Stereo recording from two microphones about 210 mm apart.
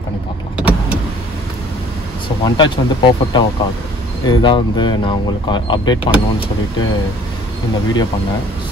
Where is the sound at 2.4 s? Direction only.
20° left (ahead or behind).